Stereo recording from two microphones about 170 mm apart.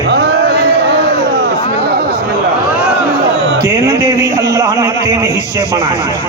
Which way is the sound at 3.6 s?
15° right (ahead or behind).